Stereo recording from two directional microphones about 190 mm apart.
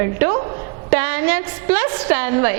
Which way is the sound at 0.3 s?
25° right (ahead or behind).